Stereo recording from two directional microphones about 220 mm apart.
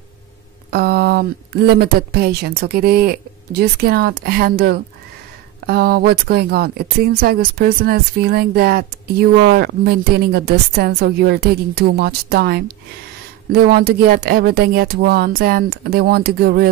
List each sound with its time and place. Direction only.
0.7 s speech: 45° right (ahead or behind)